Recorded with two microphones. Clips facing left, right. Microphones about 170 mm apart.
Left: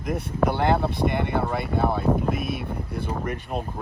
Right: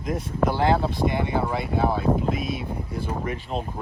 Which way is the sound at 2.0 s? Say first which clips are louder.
Even; centre (ahead or behind).